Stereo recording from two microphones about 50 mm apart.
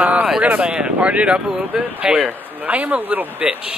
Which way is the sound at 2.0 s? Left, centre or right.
Centre.